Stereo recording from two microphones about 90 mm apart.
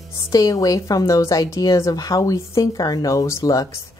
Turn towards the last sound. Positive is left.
turn(degrees=40)  # may be behind; listen again after turning